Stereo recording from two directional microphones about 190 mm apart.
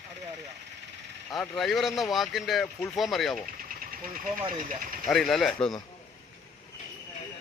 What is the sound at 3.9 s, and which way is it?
Speech, 45° right (ahead or behind).